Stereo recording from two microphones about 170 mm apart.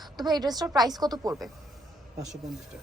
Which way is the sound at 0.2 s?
25° right (ahead or behind).